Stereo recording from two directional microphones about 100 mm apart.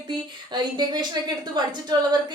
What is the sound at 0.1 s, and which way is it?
A woman's voice, 45° right (ahead or behind).